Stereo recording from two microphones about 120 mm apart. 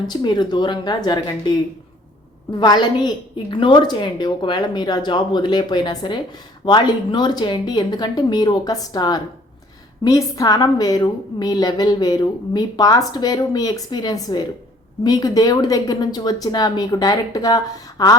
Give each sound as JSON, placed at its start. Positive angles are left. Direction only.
{"t": 0.1, "sound": "a woman's voice", "side_deg": 40}
{"t": 2.6, "sound": "a woman's voice", "side_deg": 35}